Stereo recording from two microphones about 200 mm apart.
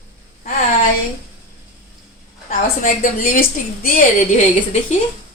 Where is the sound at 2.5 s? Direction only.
45° left (ahead or behind).